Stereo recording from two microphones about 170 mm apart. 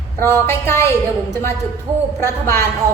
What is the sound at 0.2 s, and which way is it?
Speech, 15° left (ahead or behind).